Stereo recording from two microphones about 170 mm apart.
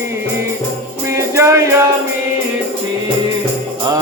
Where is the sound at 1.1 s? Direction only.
15° right (ahead or behind).